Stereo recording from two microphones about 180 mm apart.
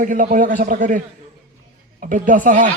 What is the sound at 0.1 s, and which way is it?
Speech, 50° right (ahead or behind).